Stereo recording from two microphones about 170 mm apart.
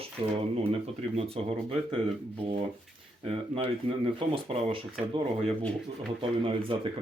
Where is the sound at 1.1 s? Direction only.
35° right (ahead or behind).